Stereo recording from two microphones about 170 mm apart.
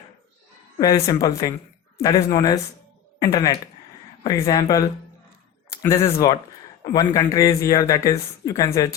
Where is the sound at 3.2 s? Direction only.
20° left (ahead or behind).